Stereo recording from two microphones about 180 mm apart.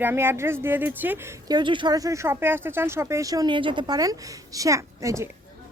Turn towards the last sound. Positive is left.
turn(degrees=-15)  # may be behind; listen again after turning